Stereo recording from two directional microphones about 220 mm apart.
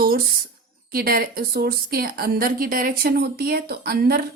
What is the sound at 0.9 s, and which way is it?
A woman's voice, 40° right (ahead or behind).